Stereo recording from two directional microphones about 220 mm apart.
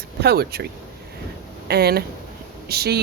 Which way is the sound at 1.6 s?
45° right (ahead or behind).